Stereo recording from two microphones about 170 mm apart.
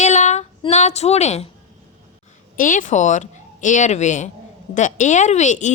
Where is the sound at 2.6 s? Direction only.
50° left (ahead or behind).